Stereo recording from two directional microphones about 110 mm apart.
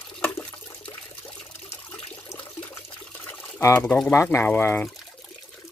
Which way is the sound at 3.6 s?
25° left (ahead or behind).